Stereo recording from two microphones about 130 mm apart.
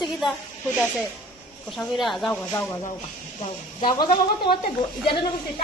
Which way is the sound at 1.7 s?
Centre (ahead or behind).